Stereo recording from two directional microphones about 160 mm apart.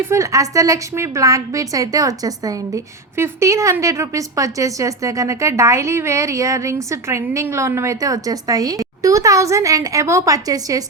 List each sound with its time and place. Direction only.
0.0 s a woman's voice: 20° right (ahead or behind)